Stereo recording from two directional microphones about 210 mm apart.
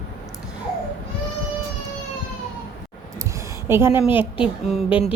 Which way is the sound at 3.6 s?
10° right (ahead or behind).